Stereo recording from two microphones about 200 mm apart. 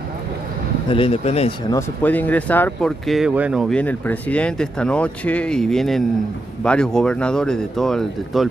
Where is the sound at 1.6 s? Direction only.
10° left (ahead or behind).